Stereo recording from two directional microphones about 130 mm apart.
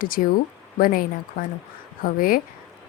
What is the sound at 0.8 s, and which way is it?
Speech, 90° left.